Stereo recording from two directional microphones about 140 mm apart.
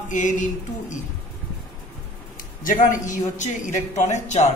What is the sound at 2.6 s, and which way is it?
A man's voice, 70° left (ahead or behind).